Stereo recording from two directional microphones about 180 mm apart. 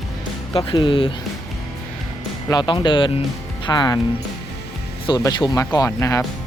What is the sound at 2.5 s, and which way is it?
Speech, 25° left (ahead or behind).